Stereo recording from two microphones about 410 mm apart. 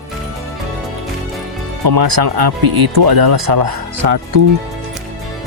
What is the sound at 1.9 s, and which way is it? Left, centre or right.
Speech, right.